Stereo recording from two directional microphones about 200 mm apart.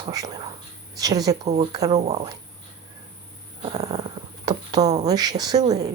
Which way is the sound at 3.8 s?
20° right (ahead or behind).